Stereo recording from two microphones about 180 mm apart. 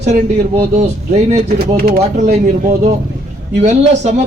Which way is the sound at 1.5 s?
60° right (ahead or behind).